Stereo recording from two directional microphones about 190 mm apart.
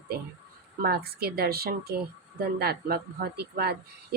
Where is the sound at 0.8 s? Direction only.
55° right (ahead or behind).